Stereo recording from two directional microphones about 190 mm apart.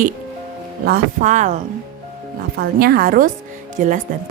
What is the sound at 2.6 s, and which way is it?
Speech, 50° right (ahead or behind).